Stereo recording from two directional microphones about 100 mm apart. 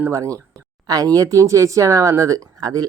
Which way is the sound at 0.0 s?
30° right (ahead or behind).